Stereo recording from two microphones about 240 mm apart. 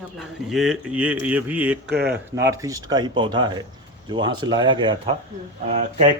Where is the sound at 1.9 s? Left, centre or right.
Right.